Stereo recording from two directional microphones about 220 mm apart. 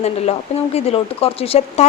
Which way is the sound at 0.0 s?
30° left (ahead or behind).